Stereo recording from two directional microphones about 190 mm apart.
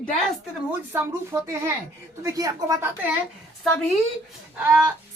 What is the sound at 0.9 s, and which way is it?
A woman's voice, 15° right (ahead or behind).